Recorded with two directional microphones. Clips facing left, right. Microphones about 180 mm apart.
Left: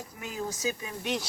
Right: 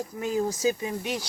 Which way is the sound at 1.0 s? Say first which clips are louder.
Even; 10° right (ahead or behind).